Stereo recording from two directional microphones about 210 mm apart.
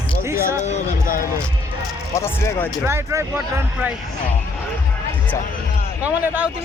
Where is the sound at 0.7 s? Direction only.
40° left (ahead or behind).